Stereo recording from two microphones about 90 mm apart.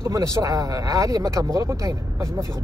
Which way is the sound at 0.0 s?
35° right (ahead or behind).